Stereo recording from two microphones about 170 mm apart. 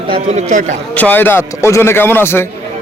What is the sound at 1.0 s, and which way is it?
A man's voice, 10° left (ahead or behind).